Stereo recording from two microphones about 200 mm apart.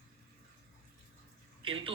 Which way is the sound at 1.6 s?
25° right (ahead or behind).